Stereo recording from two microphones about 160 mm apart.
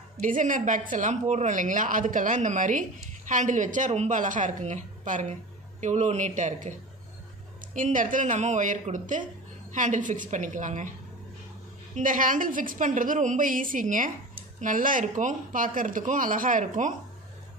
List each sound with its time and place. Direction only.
0.2 s speech: 55° right (ahead or behind)
7.7 s speech: 55° right (ahead or behind)
11.9 s speech: 55° right (ahead or behind)